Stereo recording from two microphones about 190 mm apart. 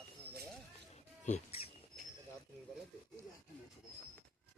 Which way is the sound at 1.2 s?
35° left (ahead or behind).